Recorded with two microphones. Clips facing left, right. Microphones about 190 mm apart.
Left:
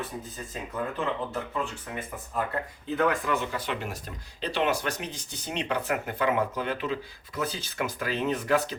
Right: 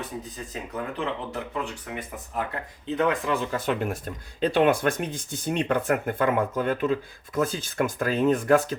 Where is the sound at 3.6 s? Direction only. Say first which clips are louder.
Right 6 dB; 50° right (ahead or behind).